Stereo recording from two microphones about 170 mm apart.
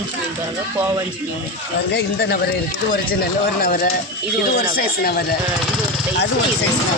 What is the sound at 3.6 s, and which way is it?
Speech, 60° left (ahead or behind).